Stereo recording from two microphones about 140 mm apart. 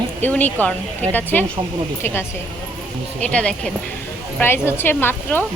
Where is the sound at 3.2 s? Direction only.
10° left (ahead or behind).